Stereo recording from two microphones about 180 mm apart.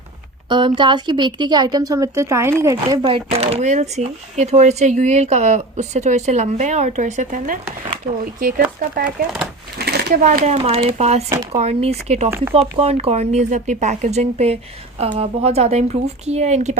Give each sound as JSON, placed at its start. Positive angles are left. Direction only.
{"t": 0.4, "sound": "a woman's voice", "side_deg": -25}
{"t": 9.0, "sound": "speech", "side_deg": -5}
{"t": 9.7, "sound": "a sound", "side_deg": -65}
{"t": 10.1, "sound": "a woman's voice", "side_deg": -45}